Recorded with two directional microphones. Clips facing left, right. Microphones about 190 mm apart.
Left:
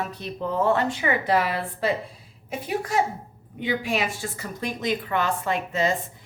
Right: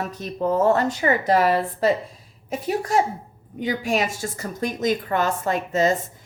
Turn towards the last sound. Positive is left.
turn(degrees=-45)  # may be behind; listen again after turning